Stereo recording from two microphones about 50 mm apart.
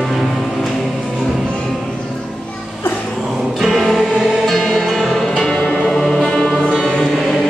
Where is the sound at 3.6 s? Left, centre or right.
Centre.